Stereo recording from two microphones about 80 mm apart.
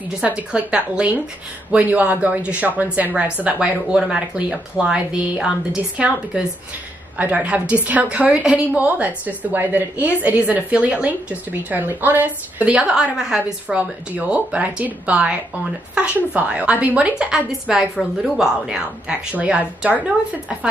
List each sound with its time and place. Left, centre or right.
0.2 s a woman's voice: centre
3.5 s a woman's voice: centre
19.3 s a woman's voice: centre